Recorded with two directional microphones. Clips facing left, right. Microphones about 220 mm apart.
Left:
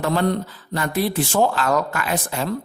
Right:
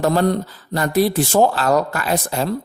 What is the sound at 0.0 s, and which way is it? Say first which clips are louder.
Speech: right 3 dB; 40° right (ahead or behind).